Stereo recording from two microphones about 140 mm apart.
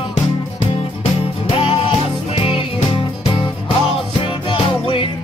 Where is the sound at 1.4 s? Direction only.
40° left (ahead or behind).